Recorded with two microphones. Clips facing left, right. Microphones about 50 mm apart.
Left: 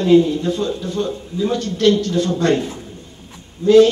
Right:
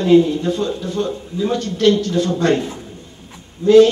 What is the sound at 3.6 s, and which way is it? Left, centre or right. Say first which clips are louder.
Speech: right 1 dB; right.